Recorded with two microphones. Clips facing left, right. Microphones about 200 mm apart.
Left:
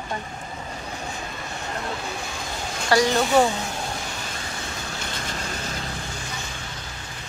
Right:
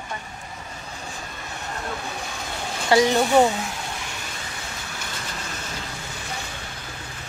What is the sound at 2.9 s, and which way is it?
Speech, 20° right (ahead or behind).